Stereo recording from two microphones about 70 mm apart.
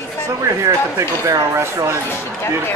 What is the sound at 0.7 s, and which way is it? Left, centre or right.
Speech, right.